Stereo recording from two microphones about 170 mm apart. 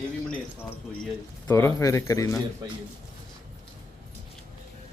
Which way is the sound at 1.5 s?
15° left (ahead or behind).